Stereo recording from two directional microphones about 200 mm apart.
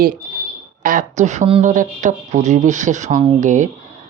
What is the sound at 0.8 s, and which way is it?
Speech, 40° right (ahead or behind).